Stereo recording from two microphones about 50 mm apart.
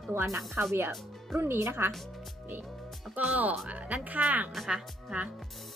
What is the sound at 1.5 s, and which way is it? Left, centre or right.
Speech, right.